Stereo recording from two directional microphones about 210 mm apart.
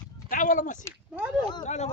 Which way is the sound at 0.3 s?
40° left (ahead or behind).